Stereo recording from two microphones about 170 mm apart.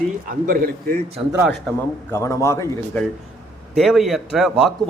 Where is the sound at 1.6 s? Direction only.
15° left (ahead or behind).